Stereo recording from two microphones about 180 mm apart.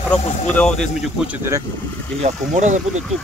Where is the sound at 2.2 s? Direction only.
40° right (ahead or behind).